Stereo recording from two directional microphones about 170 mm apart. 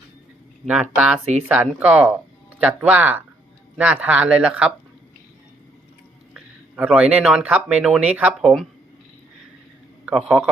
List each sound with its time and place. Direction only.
0.6 s speech: 5° right (ahead or behind)
1.2 s speech: 40° right (ahead or behind)
1.5 s speech: 10° right (ahead or behind)
6.3 s speech: 5° right (ahead or behind)
10.1 s speech: centre (ahead or behind)